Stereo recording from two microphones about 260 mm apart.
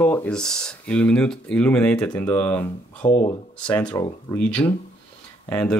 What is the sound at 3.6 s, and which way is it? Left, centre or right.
Speech, centre.